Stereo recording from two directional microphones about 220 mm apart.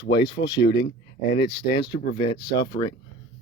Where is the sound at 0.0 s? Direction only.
50° left (ahead or behind).